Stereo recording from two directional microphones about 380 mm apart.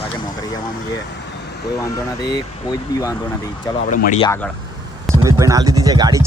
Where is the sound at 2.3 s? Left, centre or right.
Centre.